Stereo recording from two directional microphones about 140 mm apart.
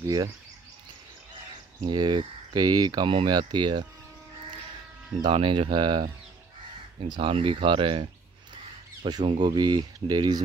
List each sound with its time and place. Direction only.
0.0 s speech: 25° right (ahead or behind)
1.8 s speech: 35° right (ahead or behind)
5.2 s speech: 35° right (ahead or behind)
7.1 s speech: 40° right (ahead or behind)